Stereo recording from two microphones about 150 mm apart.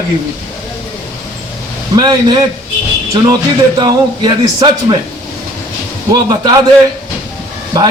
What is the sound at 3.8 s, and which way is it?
A man's voice, 30° right (ahead or behind).